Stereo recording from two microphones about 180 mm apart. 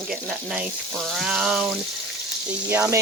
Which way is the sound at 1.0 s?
Centre (ahead or behind).